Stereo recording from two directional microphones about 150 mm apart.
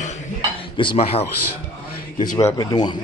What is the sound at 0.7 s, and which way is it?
Speech, 35° left (ahead or behind).